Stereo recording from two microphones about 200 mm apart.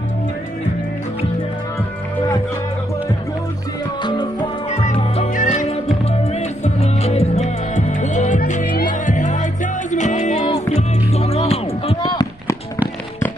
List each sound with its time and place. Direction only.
4.0 s music: 25° left (ahead or behind)
4.6 s music: 35° left (ahead or behind)